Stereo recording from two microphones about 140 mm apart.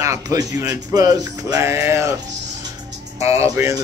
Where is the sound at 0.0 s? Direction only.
25° right (ahead or behind).